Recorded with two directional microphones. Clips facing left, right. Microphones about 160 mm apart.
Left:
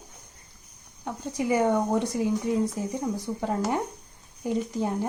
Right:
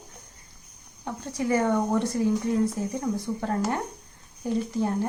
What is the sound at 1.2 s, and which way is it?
Speech, 15° left (ahead or behind).